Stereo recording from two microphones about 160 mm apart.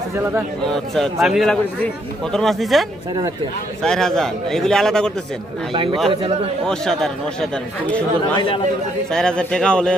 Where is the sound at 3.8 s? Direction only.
5° left (ahead or behind).